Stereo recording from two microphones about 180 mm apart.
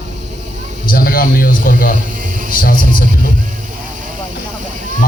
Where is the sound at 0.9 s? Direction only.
55° left (ahead or behind).